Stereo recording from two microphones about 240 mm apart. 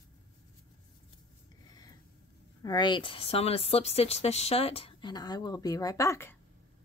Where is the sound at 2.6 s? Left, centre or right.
Centre.